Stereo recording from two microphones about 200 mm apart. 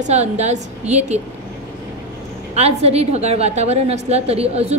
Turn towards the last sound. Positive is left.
turn(degrees=-30)  # may be behind; listen again after turning